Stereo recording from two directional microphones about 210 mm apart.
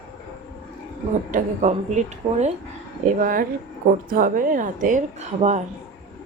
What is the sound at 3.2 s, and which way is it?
A woman's voice, 40° right (ahead or behind).